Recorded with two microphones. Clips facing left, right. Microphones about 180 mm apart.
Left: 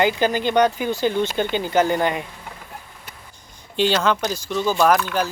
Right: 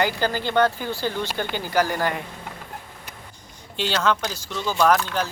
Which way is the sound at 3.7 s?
15° left (ahead or behind).